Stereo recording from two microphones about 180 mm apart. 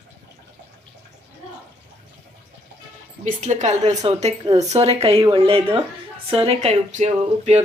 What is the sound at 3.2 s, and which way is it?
Speech, 40° right (ahead or behind).